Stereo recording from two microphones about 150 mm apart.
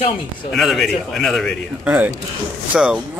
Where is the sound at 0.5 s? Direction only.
Centre (ahead or behind).